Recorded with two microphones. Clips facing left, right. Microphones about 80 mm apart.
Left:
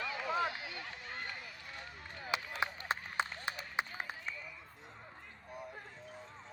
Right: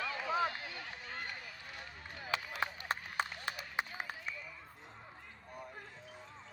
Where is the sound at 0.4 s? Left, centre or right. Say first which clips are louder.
Right 1 dB; right.